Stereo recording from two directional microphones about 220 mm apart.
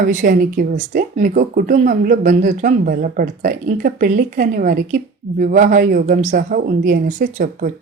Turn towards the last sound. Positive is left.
turn(degrees=-40)  # may be behind; listen again after turning